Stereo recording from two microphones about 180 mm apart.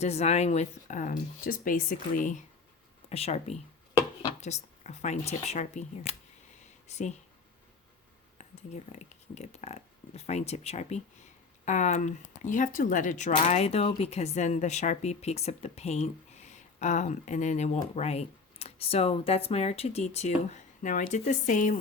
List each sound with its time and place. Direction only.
0.0 s speech: 35° left (ahead or behind)
3.1 s speech: 35° left (ahead or behind)
8.4 s speech: 40° left (ahead or behind)